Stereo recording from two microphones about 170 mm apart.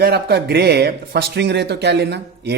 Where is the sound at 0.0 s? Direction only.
70° right (ahead or behind).